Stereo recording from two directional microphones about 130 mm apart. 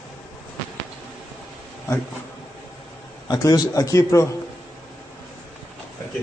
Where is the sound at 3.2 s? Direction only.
30° left (ahead or behind).